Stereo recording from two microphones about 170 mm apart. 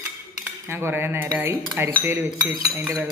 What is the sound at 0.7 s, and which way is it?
Speech, 15° right (ahead or behind).